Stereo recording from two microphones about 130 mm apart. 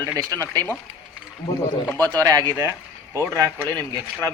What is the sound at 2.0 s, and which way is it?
Speech, 30° right (ahead or behind).